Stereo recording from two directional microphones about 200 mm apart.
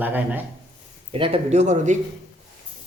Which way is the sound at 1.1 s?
25° right (ahead or behind).